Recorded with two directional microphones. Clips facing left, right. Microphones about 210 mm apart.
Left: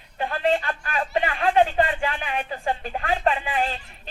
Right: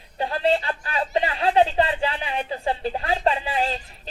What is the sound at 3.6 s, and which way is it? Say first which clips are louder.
Speech: right 1 dB; 35° right (ahead or behind).